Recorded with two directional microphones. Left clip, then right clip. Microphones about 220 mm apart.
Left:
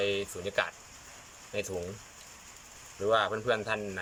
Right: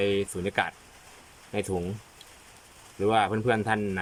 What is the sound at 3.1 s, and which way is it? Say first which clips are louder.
Speech: right 3 dB; 30° right (ahead or behind).